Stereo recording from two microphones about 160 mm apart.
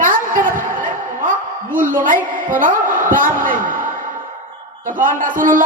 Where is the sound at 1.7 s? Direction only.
55° right (ahead or behind).